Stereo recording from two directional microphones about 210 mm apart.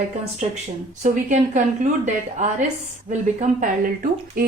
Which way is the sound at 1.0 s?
35° right (ahead or behind).